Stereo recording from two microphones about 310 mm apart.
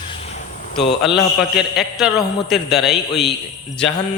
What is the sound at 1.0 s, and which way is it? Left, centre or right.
A man's voice, centre.